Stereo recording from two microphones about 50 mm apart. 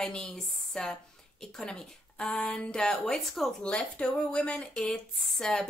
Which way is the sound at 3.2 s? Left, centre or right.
Centre.